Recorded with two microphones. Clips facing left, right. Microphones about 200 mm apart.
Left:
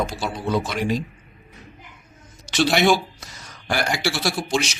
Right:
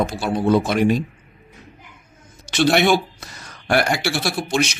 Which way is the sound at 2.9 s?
60° right (ahead or behind).